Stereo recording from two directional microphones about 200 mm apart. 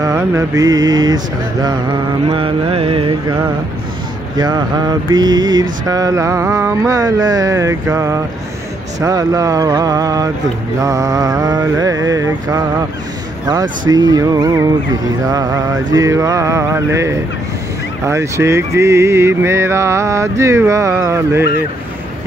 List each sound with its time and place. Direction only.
0.0 s mantra: 15° right (ahead or behind)